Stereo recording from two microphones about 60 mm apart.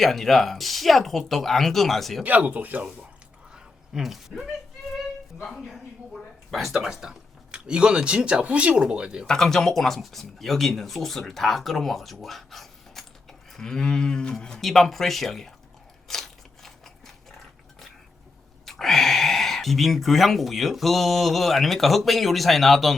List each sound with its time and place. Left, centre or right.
0.0 s speech: centre
2.2 s speech: right
3.5 s a sound: centre
5.5 s speech: centre
9.2 s speech: centre
13.5 s a sound: centre
14.4 s speech: centre
16.0 s crunch: centre
18.6 s speech: centre